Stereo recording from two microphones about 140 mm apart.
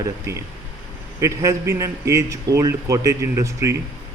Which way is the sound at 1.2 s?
20° right (ahead or behind).